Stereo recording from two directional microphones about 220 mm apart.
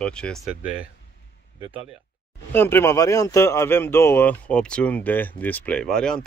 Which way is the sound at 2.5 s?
10° left (ahead or behind).